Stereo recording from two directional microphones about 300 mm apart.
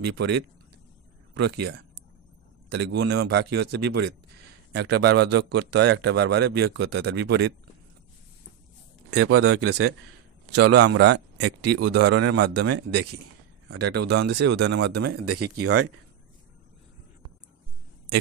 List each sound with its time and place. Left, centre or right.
0.2 s a man's voice: right
9.1 s speech: right
10.5 s a man's voice: right
14.1 s a man's voice: right
15.0 s speech: right